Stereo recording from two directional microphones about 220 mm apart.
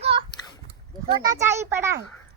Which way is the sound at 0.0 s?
25° right (ahead or behind).